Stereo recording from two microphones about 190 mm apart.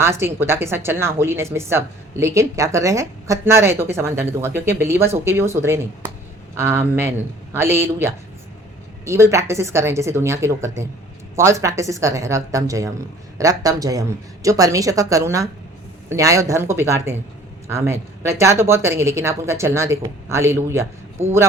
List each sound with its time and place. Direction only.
0.0 s a woman's voice: 15° right (ahead or behind)